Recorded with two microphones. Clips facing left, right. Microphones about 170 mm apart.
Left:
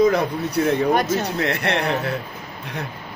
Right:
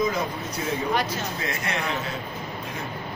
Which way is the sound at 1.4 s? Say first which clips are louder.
Left 7 dB; 65° left (ahead or behind).